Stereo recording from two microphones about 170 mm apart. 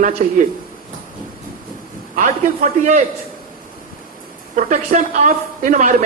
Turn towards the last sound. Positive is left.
turn(degrees=-50)  # may be behind; listen again after turning